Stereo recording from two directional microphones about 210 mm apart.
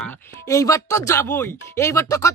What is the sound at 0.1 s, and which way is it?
Speech, 10° left (ahead or behind).